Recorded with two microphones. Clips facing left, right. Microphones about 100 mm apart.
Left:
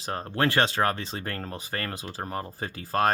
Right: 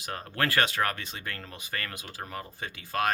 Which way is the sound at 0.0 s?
30° left (ahead or behind).